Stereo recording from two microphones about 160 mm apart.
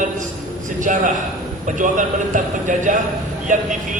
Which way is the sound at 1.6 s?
55° right (ahead or behind).